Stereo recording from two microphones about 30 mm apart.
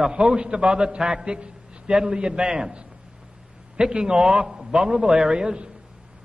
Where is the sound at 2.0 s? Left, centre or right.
Right.